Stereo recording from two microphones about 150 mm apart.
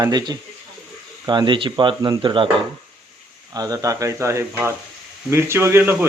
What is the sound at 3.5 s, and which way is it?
Speech, 25° right (ahead or behind).